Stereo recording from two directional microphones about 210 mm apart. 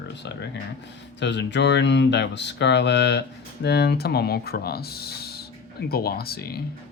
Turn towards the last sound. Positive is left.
turn(degrees=45)  # may be behind; listen again after turning